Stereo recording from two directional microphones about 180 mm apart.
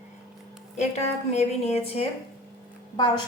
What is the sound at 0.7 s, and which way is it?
A woman's voice, 35° left (ahead or behind).